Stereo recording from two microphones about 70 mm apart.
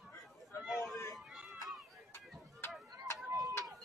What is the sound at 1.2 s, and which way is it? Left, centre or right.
Run, centre.